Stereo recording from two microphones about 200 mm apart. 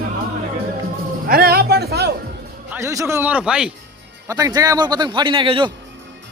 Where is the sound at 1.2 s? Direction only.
50° right (ahead or behind).